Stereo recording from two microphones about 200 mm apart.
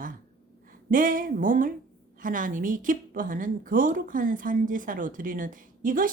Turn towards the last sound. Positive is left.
turn(degrees=-40)  # may be behind; listen again after turning